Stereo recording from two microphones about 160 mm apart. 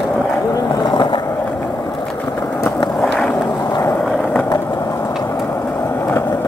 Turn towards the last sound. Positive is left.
turn(degrees=15)  # may be behind; listen again after turning